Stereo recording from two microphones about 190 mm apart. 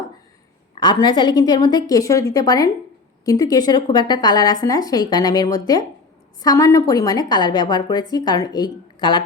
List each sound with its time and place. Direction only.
0.8 s a woman's voice: 25° left (ahead or behind)